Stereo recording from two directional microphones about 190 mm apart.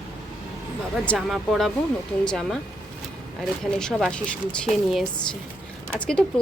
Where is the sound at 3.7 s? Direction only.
5° left (ahead or behind).